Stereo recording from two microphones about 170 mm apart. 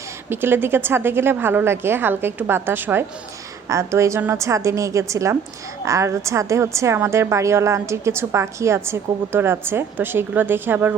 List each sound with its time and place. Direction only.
0.3 s a woman's voice: 15° right (ahead or behind)